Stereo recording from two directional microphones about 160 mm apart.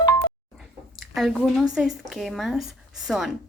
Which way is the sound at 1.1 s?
Centre (ahead or behind).